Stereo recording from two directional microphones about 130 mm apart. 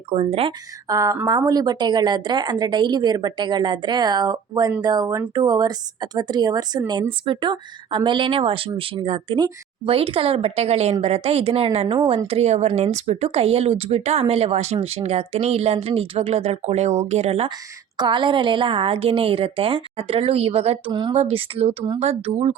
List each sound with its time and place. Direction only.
0.1 s speech: 50° right (ahead or behind)
0.9 s a woman's voice: 25° right (ahead or behind); by 17.5 s 50° right (ahead or behind)
17.9 s speech: 35° right (ahead or behind); by 22.5 s 50° right (ahead or behind)